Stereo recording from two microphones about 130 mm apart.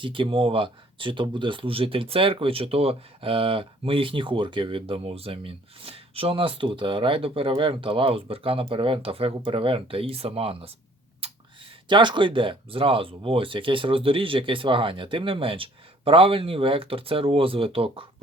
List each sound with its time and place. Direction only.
0.0 s speech: 40° right (ahead or behind)
11.2 s clicking: 50° right (ahead or behind)
11.9 s speech: 35° right (ahead or behind)